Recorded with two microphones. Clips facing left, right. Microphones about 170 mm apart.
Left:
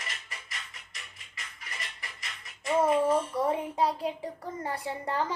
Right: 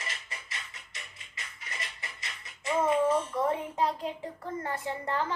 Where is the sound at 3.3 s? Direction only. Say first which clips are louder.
Left 1 dB; 15° left (ahead or behind).